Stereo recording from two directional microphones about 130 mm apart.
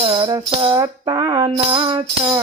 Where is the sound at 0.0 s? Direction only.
40° right (ahead or behind).